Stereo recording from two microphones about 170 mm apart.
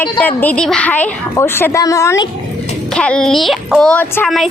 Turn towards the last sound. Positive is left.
turn(degrees=5)  # may be behind; listen again after turning